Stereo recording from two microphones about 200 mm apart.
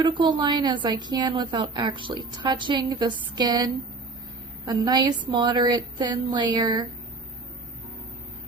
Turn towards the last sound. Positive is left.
turn(degrees=-20)  # may be behind; listen again after turning